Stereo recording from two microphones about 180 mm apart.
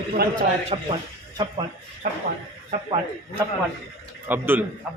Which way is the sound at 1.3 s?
25° right (ahead or behind).